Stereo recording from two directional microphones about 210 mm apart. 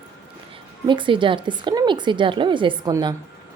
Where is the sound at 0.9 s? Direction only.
25° right (ahead or behind).